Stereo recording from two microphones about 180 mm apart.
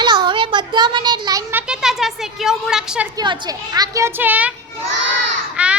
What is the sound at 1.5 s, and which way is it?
Speech, 5° right (ahead or behind).